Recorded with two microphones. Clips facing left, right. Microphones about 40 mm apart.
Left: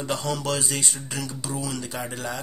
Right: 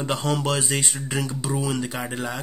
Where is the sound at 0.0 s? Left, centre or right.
Right.